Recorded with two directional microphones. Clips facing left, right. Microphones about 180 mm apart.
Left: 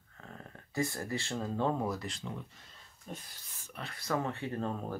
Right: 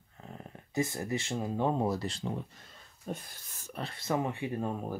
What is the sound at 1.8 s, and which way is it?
Speech, 30° right (ahead or behind).